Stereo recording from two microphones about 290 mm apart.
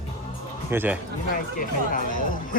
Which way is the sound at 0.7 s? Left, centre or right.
Centre.